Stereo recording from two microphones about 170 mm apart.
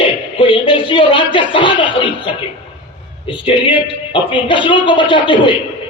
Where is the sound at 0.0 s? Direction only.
30° left (ahead or behind).